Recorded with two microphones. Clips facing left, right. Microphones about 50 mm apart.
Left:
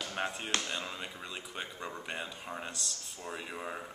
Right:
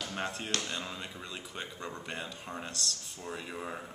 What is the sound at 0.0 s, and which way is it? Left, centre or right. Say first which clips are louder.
Speech: even; centre.